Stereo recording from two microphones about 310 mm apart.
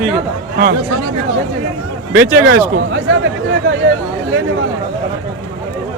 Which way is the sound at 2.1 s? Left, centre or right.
Right.